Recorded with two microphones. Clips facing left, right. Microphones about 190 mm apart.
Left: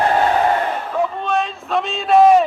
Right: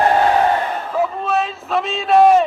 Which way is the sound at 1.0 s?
5° right (ahead or behind).